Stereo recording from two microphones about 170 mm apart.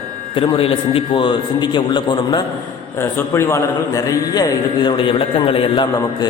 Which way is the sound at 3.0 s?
15° left (ahead or behind).